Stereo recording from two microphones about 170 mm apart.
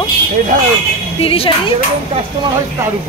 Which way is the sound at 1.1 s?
35° left (ahead or behind).